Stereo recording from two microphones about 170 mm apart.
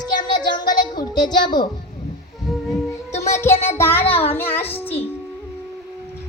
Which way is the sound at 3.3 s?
15° left (ahead or behind).